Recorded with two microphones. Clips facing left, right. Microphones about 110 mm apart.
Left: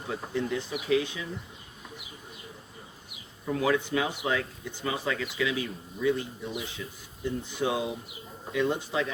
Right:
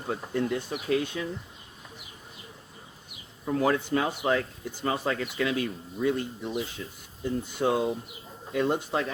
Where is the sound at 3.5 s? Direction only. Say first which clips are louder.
Right 1 dB; 45° right (ahead or behind).